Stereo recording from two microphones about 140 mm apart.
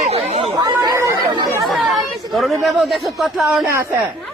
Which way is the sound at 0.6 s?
25° right (ahead or behind).